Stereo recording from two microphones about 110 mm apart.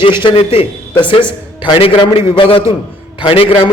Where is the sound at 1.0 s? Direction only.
45° left (ahead or behind).